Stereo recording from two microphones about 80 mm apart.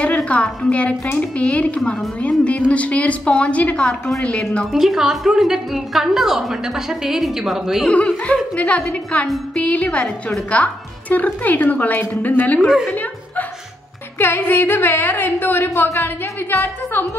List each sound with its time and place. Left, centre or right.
0.0 s a woman's voice: centre
4.7 s a woman's voice: centre
7.8 s a woman's voice: centre
12.5 s a woman's voice: centre
14.1 s a woman's voice: left